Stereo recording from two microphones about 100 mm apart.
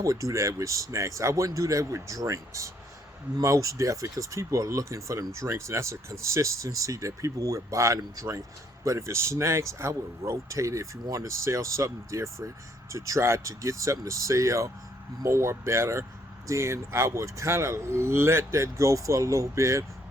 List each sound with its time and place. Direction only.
0.0 s speech: 35° right (ahead or behind)